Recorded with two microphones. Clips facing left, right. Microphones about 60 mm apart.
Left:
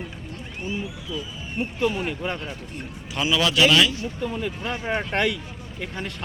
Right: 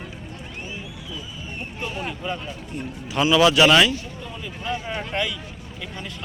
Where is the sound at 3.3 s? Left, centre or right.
Centre.